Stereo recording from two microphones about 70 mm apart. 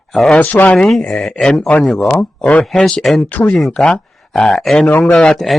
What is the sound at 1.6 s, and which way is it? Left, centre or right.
Speech, centre.